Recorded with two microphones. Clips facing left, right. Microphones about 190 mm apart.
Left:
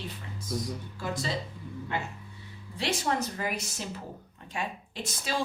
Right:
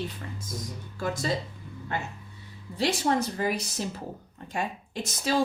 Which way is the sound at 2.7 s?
30° right (ahead or behind).